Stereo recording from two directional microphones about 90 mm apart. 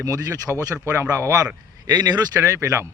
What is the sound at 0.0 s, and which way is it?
A man's voice, 40° right (ahead or behind).